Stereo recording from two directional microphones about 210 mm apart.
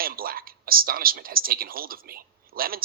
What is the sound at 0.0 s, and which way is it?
Speech, 45° right (ahead or behind).